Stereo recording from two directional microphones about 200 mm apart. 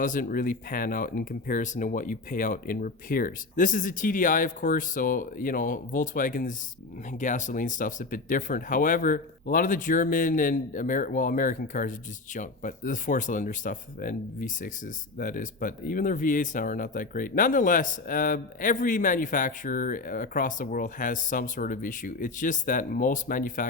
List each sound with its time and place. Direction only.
0.0 s speech: 45° left (ahead or behind)